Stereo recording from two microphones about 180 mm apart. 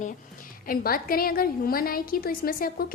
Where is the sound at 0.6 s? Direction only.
55° left (ahead or behind).